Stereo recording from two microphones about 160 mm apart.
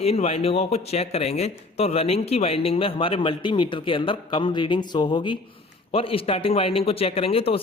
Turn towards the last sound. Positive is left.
turn(degrees=35)  # may be behind; listen again after turning